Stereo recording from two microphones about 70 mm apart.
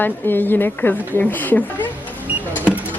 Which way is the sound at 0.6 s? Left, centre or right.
Left.